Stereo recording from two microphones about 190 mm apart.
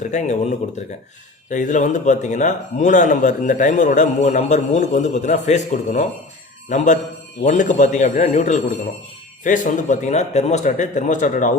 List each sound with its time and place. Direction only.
0.0 s a man's voice: 40° left (ahead or behind)
1.5 s a man's voice: 40° left (ahead or behind)